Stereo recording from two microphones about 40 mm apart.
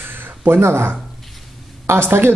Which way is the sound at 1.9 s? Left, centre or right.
Right.